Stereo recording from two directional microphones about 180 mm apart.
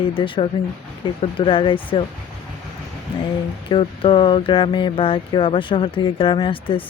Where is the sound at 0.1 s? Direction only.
30° left (ahead or behind).